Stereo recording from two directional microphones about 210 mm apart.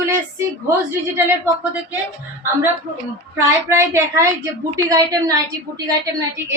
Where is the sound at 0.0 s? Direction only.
15° right (ahead or behind).